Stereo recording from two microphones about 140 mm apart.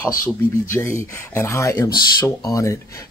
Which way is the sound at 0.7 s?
20° left (ahead or behind).